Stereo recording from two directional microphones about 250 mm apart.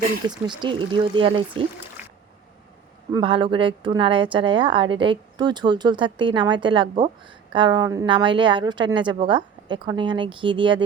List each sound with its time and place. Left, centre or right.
0.2 s a woman's voice: centre
3.1 s a woman's voice: right